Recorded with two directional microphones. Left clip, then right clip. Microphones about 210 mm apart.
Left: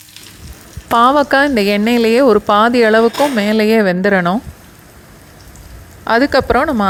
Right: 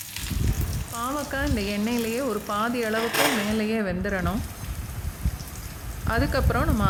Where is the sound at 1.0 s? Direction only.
40° left (ahead or behind).